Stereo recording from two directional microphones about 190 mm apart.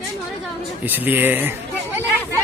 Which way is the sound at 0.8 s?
10° right (ahead or behind).